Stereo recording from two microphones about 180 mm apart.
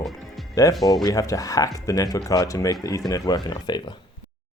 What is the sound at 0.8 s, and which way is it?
Speech, 20° left (ahead or behind).